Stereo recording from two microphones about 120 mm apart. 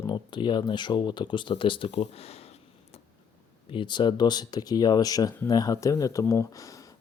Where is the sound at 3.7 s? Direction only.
40° left (ahead or behind).